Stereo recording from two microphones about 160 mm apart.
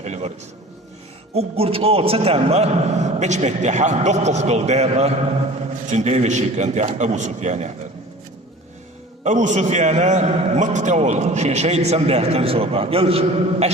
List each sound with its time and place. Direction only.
0.0 s a sound: 45° right (ahead or behind)
1.3 s a man's voice: 40° right (ahead or behind)
9.2 s a man's voice: 50° right (ahead or behind)